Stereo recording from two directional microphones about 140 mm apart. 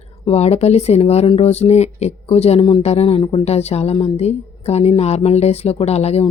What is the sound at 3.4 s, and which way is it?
Speech, 50° left (ahead or behind).